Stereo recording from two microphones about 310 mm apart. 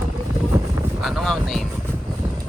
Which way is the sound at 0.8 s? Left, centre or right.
Centre.